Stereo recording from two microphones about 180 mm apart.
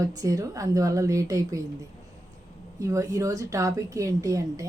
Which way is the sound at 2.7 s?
15° right (ahead or behind).